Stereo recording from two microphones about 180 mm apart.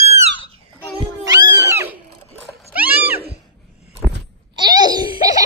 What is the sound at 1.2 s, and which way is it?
Cat, 20° right (ahead or behind).